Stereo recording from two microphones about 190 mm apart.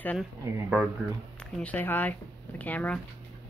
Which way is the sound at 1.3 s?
5° left (ahead or behind).